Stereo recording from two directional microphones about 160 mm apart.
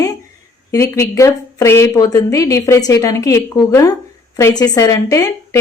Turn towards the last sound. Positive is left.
turn(degrees=20)  # may be behind; listen again after turning